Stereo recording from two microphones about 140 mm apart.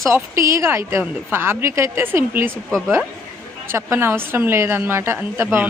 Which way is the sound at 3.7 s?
15° right (ahead or behind).